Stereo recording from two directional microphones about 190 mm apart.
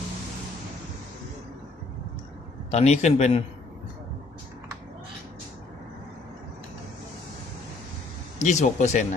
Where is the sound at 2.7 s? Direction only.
35° left (ahead or behind).